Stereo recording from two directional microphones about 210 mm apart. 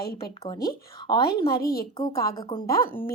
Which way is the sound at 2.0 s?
20° left (ahead or behind).